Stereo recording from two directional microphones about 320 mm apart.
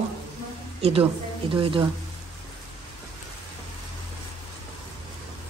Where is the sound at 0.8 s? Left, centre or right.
Centre.